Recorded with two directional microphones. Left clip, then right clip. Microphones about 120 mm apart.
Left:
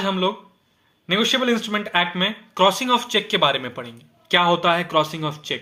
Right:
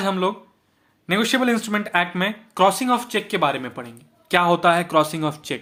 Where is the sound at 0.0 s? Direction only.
45° right (ahead or behind); by 3.9 s 20° right (ahead or behind).